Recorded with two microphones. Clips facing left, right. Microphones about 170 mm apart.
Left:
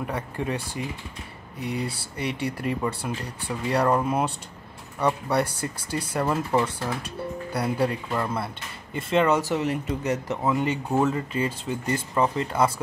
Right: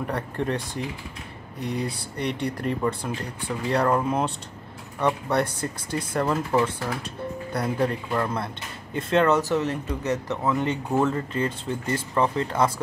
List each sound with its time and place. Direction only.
0.0 s speech: 5° left (ahead or behind)
2.1 s speech: 5° left (ahead or behind)